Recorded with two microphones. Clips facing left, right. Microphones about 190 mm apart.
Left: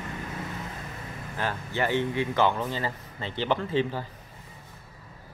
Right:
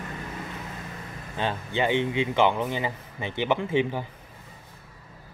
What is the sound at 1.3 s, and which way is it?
Speech, 20° right (ahead or behind).